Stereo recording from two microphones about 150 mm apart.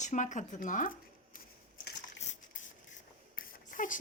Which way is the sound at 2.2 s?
55° left (ahead or behind).